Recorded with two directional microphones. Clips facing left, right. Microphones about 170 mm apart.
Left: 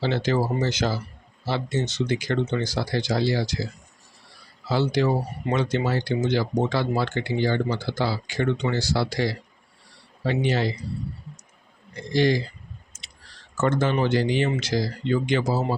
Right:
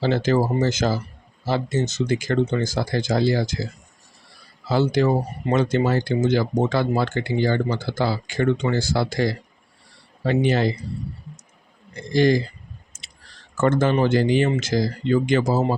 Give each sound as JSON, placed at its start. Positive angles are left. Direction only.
{"t": 0.0, "sound": "speech", "side_deg": -45}
{"t": 4.7, "sound": "speech", "side_deg": -50}
{"t": 12.1, "sound": "speech", "side_deg": -45}
{"t": 12.9, "sound": "clicking", "side_deg": -50}
{"t": 13.6, "sound": "speech", "side_deg": -50}